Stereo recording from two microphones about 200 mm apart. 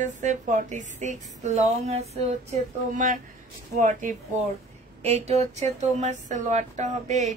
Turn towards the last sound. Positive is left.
turn(degrees=-35)  # may be behind; listen again after turning